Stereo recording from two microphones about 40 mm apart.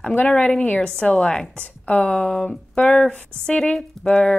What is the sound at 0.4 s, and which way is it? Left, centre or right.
A woman's voice, left.